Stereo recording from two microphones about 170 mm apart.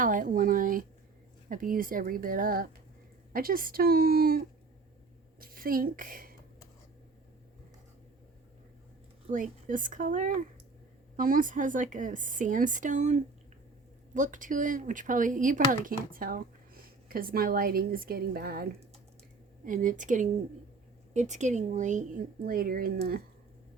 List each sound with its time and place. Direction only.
0.0 s speech: 50° right (ahead or behind)
5.4 s a woman's voice: 60° right (ahead or behind)
9.3 s speech: 50° right (ahead or behind)
19.6 s speech: 50° right (ahead or behind)
22.4 s speech: 60° right (ahead or behind)